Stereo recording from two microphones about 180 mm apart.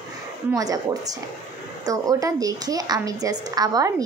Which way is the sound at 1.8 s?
20° right (ahead or behind).